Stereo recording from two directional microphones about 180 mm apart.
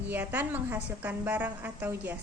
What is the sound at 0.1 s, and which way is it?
A woman's voice, 10° right (ahead or behind).